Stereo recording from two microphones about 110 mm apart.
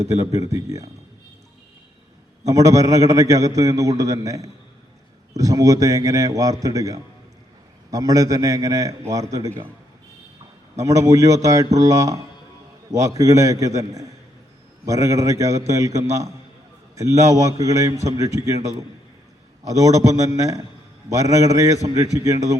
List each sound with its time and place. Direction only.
0.1 s a man's voice: 30° right (ahead or behind)
2.5 s a man's voice: 30° right (ahead or behind)
10.8 s a man's voice: 30° right (ahead or behind)
17.2 s a man's voice: 30° right (ahead or behind)